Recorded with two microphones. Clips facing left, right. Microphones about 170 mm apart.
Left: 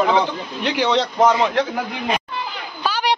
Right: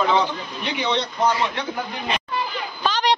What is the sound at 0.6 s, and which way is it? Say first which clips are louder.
A man's voice: left 6 dB; 90° left.